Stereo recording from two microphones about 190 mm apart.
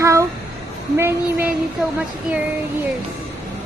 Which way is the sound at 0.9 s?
10° right (ahead or behind).